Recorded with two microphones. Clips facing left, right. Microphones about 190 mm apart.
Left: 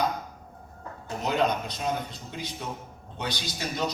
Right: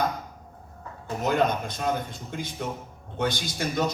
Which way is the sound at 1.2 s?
50° right (ahead or behind).